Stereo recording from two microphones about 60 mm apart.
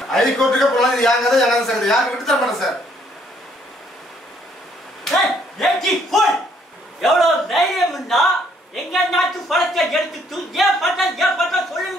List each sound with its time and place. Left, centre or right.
0.1 s a man's voice: centre
5.0 s a sound: centre
7.0 s a man's voice: centre